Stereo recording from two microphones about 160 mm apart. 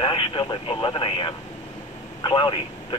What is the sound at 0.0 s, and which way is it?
Speech, 30° left (ahead or behind).